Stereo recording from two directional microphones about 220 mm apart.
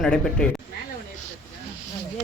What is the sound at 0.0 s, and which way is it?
Speech, 5° left (ahead or behind).